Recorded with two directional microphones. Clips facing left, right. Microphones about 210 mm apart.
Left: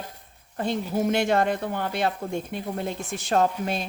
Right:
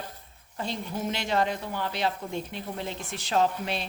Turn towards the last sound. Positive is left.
turn(degrees=45)  # may be behind; listen again after turning